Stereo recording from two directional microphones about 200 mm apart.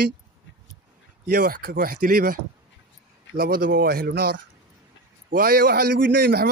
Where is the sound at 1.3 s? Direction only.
45° right (ahead or behind).